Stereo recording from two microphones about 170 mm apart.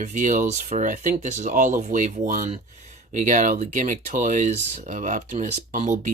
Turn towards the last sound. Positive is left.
turn(degrees=-45)  # may be behind; listen again after turning